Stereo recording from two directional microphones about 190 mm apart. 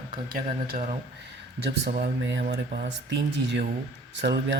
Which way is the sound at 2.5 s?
60° right (ahead or behind).